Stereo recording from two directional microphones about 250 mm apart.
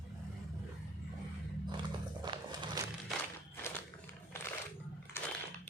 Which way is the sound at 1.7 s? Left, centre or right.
Centre.